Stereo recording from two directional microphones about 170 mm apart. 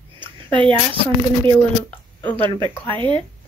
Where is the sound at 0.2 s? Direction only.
30° right (ahead or behind).